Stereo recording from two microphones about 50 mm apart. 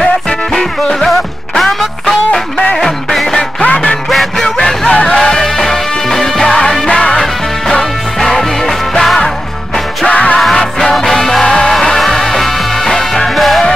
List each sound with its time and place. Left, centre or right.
0.0 s music: centre
3.6 s music: left
4.1 s music: centre
4.6 s music: centre
10.0 s music: left
10.4 s music: centre